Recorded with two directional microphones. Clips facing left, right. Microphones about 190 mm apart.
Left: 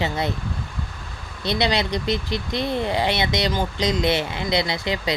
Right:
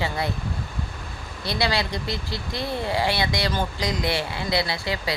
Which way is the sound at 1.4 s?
20° left (ahead or behind).